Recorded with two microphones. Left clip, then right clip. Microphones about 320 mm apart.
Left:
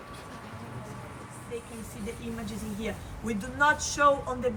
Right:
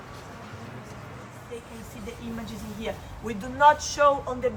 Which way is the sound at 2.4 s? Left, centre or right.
Right.